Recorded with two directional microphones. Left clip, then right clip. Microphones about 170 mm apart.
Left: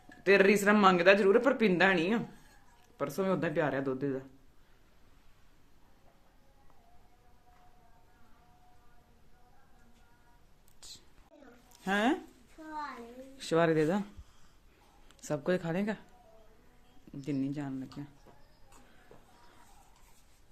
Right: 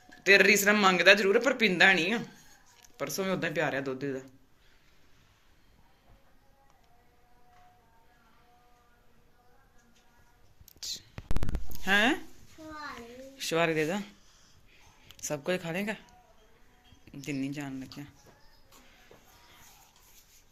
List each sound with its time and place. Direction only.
0.2 s a man's voice: 25° left (ahead or behind)
11.9 s speech: 10° left (ahead or behind)
13.3 s speech: 35° left (ahead or behind)
15.0 s speech: 35° left (ahead or behind)
17.1 s a man's voice: 25° left (ahead or behind)
18.0 s speech: 15° left (ahead or behind)